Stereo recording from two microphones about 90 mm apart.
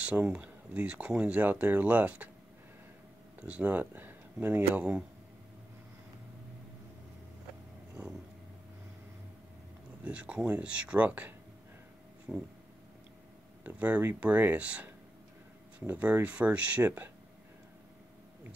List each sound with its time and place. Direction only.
0.2 s speech: 15° right (ahead or behind)
3.3 s speech: 15° right (ahead or behind)
8.0 s speech: 15° right (ahead or behind)
10.0 s speech: 10° right (ahead or behind)
13.7 s speech: 15° right (ahead or behind)
15.9 s speech: 20° right (ahead or behind)